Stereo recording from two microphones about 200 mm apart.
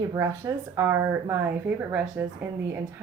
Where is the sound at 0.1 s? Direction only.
15° right (ahead or behind).